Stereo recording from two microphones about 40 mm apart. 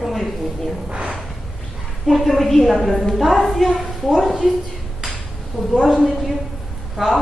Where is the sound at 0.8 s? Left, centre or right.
Right.